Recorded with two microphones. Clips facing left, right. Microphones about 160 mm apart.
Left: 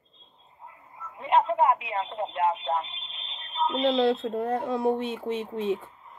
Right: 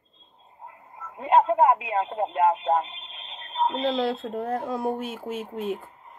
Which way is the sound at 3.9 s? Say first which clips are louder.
Left 3 dB; centre (ahead or behind).